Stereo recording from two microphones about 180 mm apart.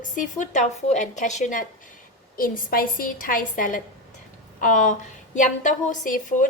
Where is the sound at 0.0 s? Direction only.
45° left (ahead or behind).